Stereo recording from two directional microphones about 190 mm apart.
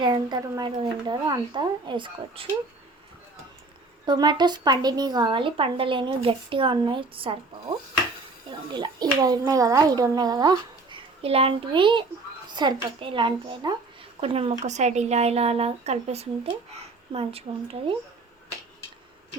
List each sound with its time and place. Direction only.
0.0 s a child's voice: 20° right (ahead or behind)
4.0 s a child's voice: 20° right (ahead or behind)
8.4 s a child's voice: 25° right (ahead or behind)